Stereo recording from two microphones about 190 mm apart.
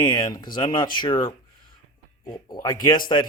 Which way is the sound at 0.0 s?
20° left (ahead or behind).